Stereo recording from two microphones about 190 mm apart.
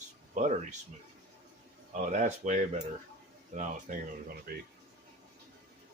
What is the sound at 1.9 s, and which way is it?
Speech, 40° right (ahead or behind).